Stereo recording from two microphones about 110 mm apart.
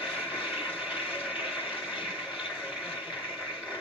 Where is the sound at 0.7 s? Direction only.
10° right (ahead or behind).